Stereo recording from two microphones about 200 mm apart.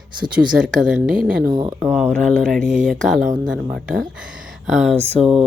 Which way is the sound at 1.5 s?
20° right (ahead or behind).